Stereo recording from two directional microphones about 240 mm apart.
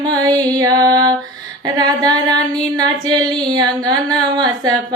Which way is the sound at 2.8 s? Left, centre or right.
Centre.